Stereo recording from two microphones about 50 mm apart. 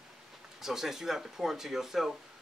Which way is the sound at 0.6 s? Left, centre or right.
Centre.